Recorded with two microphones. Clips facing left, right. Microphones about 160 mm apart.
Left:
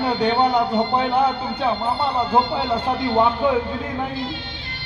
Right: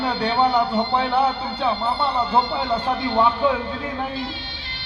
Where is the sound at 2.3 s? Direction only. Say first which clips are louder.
Left 1 dB; 15° left (ahead or behind).